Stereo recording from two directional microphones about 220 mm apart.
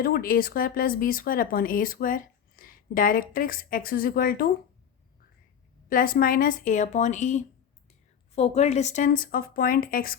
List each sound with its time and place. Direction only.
0.0 s speech: 40° left (ahead or behind)
5.9 s speech: 40° left (ahead or behind)